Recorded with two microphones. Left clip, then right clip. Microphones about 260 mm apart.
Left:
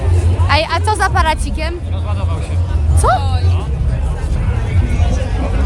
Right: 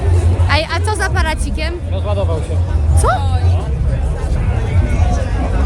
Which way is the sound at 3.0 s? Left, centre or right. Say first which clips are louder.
Left 2 dB; centre.